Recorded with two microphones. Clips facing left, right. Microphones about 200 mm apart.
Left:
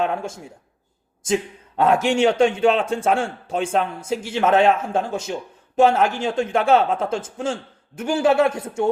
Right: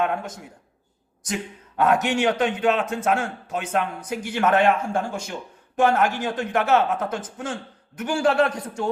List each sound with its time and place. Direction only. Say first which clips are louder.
0.0 s a man's voice: left 2 dB; 25° left (ahead or behind)